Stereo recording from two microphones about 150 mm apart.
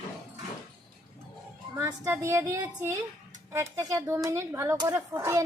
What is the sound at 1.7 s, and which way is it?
A woman's voice, 15° right (ahead or behind).